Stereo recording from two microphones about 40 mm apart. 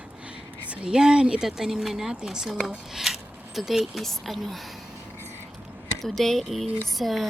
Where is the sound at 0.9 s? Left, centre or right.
Centre.